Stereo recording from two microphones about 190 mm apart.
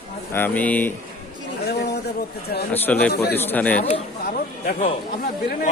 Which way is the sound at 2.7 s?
10° left (ahead or behind).